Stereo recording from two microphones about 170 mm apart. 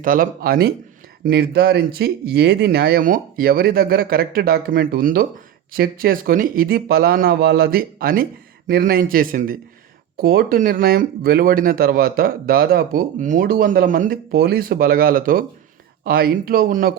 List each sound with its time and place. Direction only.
0.0 s speech: 55° right (ahead or behind)